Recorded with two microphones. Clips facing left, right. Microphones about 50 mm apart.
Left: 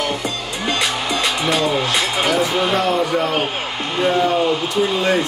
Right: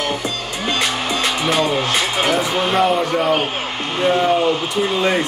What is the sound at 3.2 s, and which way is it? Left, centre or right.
Speech, centre.